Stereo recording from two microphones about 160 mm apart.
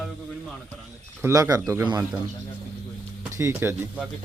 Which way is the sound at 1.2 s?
20° right (ahead or behind).